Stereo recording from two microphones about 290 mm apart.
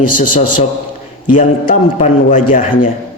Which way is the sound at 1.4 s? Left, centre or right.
Left.